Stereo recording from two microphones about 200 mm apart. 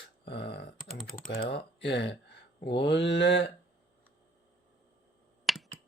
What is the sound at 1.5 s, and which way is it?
Speech, 55° left (ahead or behind).